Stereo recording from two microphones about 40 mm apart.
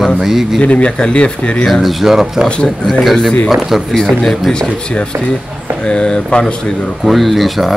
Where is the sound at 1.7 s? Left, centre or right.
Centre.